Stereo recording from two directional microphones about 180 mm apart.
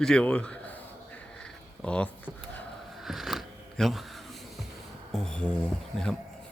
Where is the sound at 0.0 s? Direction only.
5° left (ahead or behind).